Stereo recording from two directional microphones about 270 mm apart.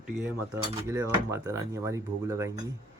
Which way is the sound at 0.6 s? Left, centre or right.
Centre.